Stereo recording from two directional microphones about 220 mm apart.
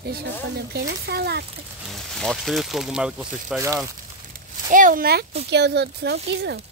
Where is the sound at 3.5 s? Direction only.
15° right (ahead or behind).